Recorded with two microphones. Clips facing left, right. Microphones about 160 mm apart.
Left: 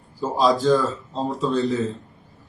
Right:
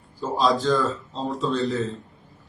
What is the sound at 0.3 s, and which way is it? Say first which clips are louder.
Speech: left 3 dB; centre (ahead or behind).